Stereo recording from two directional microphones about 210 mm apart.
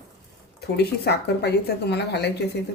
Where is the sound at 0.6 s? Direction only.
50° left (ahead or behind).